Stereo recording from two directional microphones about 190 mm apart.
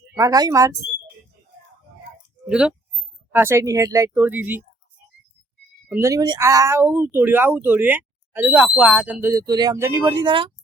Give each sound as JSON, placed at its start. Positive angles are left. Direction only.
{"t": 0.2, "sound": "speech", "side_deg": -20}
{"t": 2.5, "sound": "speech", "side_deg": -5}
{"t": 5.9, "sound": "speech", "side_deg": -15}